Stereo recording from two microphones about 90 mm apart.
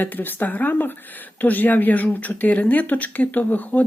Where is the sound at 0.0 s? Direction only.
20° left (ahead or behind).